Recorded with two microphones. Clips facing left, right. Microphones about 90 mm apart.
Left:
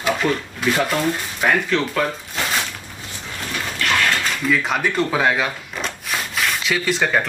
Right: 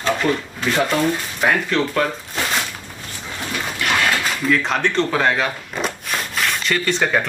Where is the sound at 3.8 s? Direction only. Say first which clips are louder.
Even; 15° right (ahead or behind).